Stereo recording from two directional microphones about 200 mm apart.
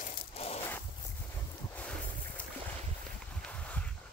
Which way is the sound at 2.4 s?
5° left (ahead or behind).